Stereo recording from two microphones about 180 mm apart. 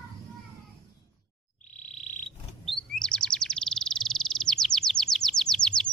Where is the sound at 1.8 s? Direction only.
40° left (ahead or behind).